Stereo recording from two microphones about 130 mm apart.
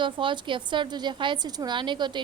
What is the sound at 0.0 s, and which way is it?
A woman's voice, 40° right (ahead or behind).